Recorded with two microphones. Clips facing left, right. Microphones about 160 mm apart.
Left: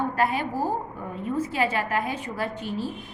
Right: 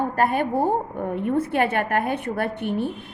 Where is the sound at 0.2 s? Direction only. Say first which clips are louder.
Right 6 dB; 55° right (ahead or behind).